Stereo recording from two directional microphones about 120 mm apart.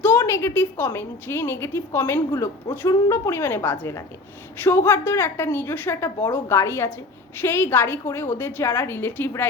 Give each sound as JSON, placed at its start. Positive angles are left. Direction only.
{"t": 0.0, "sound": "a woman's voice", "side_deg": 20}